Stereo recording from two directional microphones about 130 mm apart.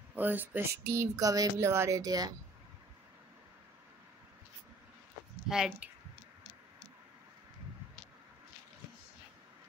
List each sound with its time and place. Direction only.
0.1 s speech: 15° right (ahead or behind); by 2.3 s 30° right (ahead or behind)
5.5 s speech: 5° right (ahead or behind)